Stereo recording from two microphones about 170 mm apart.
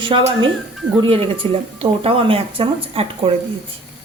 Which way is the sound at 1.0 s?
30° right (ahead or behind).